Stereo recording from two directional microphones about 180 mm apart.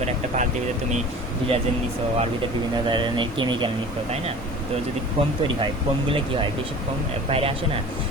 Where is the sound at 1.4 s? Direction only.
30° right (ahead or behind).